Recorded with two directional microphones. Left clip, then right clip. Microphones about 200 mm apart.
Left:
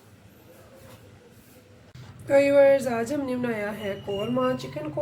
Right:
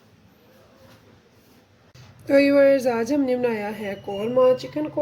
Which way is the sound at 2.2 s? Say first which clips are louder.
Right 1 dB; 50° right (ahead or behind).